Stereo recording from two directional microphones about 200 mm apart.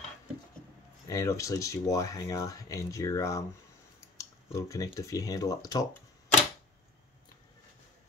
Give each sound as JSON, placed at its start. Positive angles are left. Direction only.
{"t": 1.0, "sound": "speech", "side_deg": 15}